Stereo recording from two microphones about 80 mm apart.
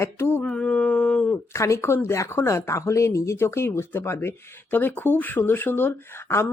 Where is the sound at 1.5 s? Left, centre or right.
Left.